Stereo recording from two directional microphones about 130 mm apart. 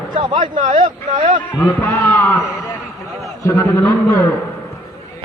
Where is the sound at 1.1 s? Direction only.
40° right (ahead or behind).